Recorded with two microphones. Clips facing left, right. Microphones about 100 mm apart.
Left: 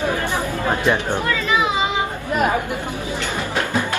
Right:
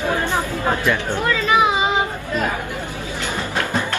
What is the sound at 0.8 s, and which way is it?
Speech, 20° left (ahead or behind).